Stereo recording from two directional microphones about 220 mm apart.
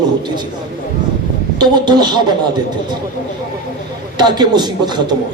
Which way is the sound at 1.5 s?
20° right (ahead or behind).